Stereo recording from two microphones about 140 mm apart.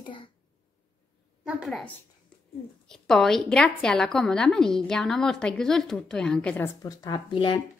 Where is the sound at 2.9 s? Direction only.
5° left (ahead or behind); by 7.2 s 25° left (ahead or behind).